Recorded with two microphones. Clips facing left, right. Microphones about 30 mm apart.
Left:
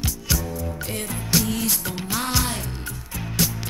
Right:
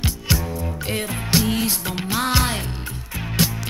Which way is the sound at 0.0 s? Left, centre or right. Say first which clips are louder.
Right 3 dB; right.